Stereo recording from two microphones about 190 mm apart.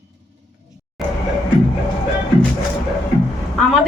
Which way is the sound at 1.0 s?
Centre (ahead or behind).